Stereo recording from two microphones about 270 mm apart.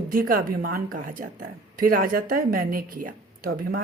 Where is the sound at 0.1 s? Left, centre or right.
Right.